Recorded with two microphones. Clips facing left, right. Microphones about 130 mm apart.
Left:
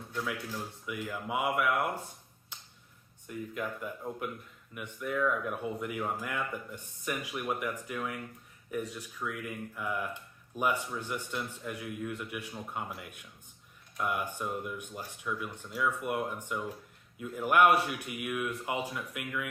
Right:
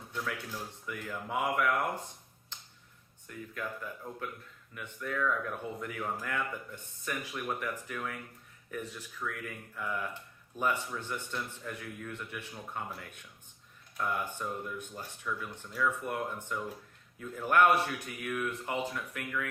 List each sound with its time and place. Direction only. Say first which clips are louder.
0.3 s speech: left 2 dB; 10° left (ahead or behind)
2.5 s a sound: left 1 dB; 10° left (ahead or behind)
3.2 s speech: left 4 dB; 15° left (ahead or behind)
4.7 s speech: left 3 dB; 15° left (ahead or behind)